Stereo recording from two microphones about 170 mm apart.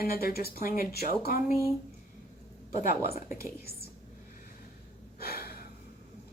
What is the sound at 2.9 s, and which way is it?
Speech, 65° left (ahead or behind).